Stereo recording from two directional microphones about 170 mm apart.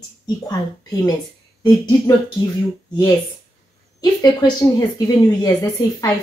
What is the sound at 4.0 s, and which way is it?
Speech, 20° left (ahead or behind).